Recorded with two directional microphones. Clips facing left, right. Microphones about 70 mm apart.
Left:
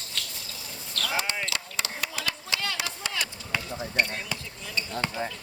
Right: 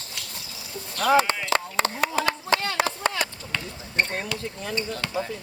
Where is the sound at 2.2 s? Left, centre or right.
Right.